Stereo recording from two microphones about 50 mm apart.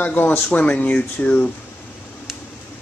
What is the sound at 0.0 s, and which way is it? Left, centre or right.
Speech, left.